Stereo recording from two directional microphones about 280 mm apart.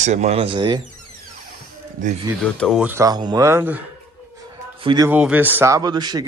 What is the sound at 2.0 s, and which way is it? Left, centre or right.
Speech, right.